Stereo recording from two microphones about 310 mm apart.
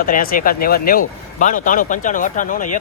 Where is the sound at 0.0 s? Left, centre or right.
Left.